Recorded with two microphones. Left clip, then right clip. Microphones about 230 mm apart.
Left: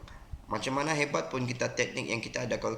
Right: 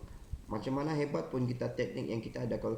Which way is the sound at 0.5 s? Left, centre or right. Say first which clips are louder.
Left 5 dB; left.